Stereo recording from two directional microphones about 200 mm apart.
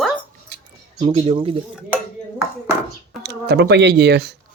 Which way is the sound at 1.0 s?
25° right (ahead or behind).